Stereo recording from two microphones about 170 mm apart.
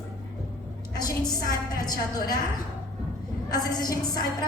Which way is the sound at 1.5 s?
25° left (ahead or behind).